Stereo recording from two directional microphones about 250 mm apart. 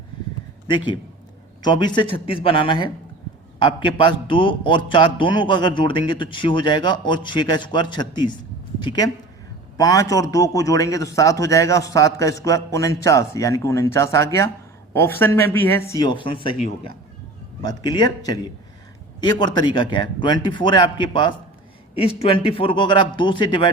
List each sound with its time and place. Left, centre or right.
1.6 s a man's voice: centre
17.6 s a man's voice: centre